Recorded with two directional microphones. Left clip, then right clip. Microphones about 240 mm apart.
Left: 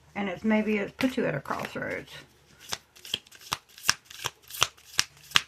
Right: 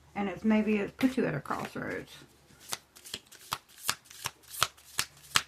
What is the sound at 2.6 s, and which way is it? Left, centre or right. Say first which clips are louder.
Shuffling cards: left 6 dB; centre.